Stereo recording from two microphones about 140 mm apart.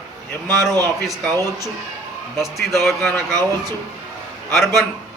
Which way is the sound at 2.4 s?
Centre (ahead or behind).